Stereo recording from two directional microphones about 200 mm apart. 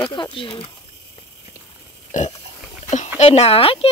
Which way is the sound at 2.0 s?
35° left (ahead or behind).